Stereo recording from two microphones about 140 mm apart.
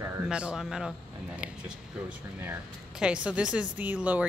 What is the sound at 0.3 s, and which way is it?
Speech, 5° right (ahead or behind).